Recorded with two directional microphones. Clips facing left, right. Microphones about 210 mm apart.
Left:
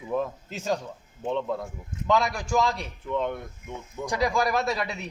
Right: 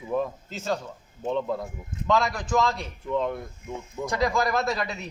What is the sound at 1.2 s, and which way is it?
Speech, 5° right (ahead or behind).